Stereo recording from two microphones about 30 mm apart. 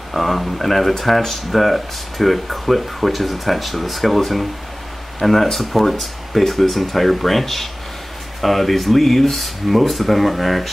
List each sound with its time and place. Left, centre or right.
0.1 s speech: centre